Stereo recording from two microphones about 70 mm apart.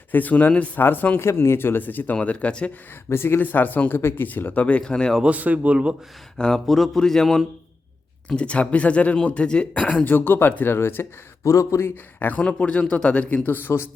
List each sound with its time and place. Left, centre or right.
0.1 s speech: left
1.2 s speech: left; by 2.7 s centre
3.1 s speech: left; by 5.1 s centre
5.2 s a man's voice: right
6.3 s speech: centre
8.3 s speech: centre; by 11.0 s left
11.4 s speech: left
12.3 s speech: centre; by 13.9 s left